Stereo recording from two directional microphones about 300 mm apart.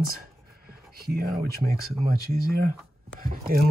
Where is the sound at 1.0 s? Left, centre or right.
Right.